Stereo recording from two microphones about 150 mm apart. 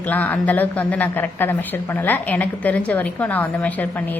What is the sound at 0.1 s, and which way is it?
A woman's voice, 10° left (ahead or behind).